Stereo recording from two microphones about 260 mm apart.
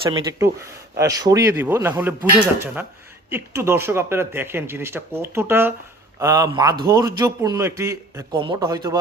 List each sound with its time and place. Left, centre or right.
0.0 s speech: centre
3.2 s speech: centre